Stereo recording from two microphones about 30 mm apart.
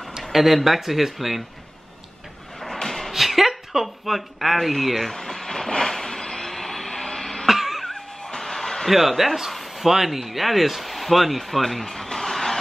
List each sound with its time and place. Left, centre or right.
0.2 s speech: centre
2.6 s a sound: centre
3.1 s speech: centre
5.1 s vehicle: centre
5.8 s a sound: centre
7.4 s a sound: centre
7.9 s music: left
8.4 s music: centre
8.9 s speech: centre